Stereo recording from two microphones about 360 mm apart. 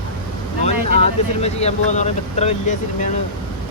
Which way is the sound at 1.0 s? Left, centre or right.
Centre.